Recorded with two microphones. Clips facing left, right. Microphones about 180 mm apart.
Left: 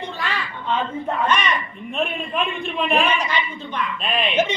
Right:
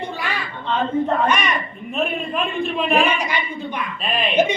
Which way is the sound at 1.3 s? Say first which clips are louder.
Even; 10° right (ahead or behind).